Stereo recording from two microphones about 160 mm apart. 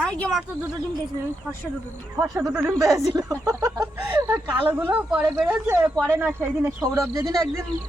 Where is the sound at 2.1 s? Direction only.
Centre (ahead or behind).